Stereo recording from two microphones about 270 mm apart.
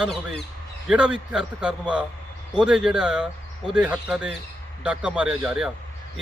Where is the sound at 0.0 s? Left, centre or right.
Centre.